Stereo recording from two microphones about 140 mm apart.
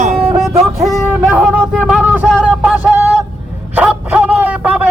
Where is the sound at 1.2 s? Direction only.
10° right (ahead or behind).